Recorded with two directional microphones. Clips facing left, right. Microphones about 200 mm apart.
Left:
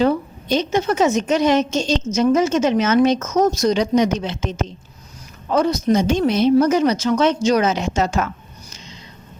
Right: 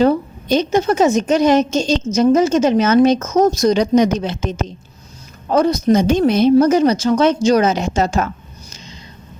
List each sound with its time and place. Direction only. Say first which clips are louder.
0.0 s speech: right 3 dB; 40° right (ahead or behind)